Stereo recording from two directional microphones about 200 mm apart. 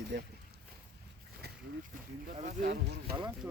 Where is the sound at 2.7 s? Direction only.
55° right (ahead or behind).